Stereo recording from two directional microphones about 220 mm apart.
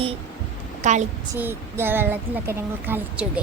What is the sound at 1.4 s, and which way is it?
Speech, 10° right (ahead or behind).